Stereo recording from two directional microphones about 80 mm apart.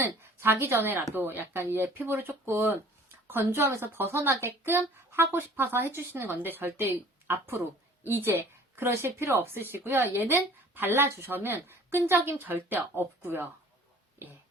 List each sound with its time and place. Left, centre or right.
0.0 s speech: right